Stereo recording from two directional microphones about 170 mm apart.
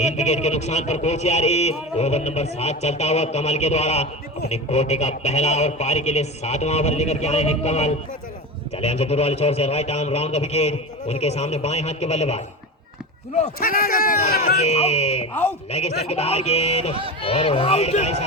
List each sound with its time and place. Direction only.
0.0 s a man's voice: 40° left (ahead or behind)
13.6 s speech: 60° left (ahead or behind)
14.6 s a man's voice: 40° left (ahead or behind)